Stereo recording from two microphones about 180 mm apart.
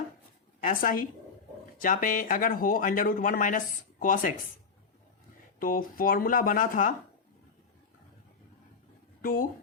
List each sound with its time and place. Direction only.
0.6 s a woman's voice: 50° left (ahead or behind)
5.5 s speech: 50° left (ahead or behind)
9.2 s speech: 50° left (ahead or behind)